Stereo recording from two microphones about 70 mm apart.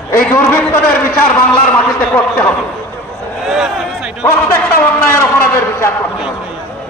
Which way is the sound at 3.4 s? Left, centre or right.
Centre.